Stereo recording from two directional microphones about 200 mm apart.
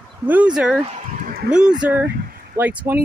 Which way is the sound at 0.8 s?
35° right (ahead or behind).